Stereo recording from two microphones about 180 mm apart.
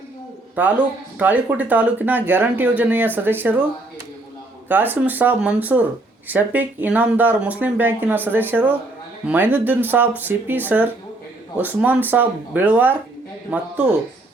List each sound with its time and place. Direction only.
0.5 s speech: 10° right (ahead or behind)
4.7 s speech: 10° right (ahead or behind)